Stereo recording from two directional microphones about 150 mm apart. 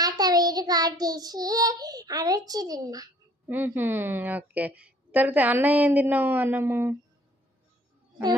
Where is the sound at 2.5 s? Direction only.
25° right (ahead or behind).